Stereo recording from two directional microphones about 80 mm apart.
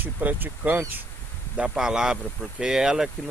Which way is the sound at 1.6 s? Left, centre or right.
Centre.